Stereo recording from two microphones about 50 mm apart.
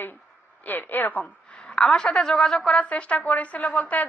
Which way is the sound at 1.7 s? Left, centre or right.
Centre.